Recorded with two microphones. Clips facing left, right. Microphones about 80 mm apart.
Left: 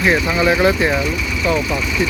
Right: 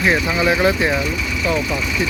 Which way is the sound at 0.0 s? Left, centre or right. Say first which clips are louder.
Left 2 dB; centre.